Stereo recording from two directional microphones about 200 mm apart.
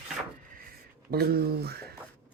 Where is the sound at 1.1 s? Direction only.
50° right (ahead or behind).